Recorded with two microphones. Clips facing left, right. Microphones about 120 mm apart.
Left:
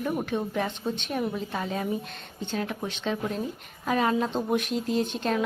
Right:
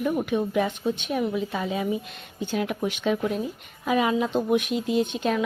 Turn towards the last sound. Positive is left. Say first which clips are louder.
# right 2 dB
turn(degrees=0)  # may be behind; listen again after turning